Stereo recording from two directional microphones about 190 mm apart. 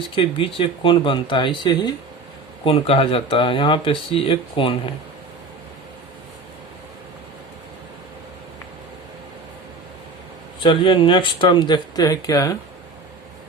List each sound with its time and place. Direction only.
0.2 s speech: 30° left (ahead or behind)
10.6 s speech: 25° left (ahead or behind)